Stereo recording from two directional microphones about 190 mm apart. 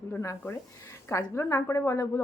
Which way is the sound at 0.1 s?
15° left (ahead or behind).